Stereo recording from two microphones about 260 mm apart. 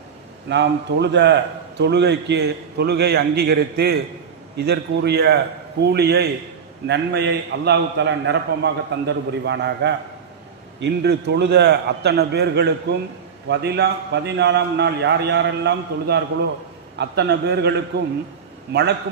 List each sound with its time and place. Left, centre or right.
0.4 s a man's voice: right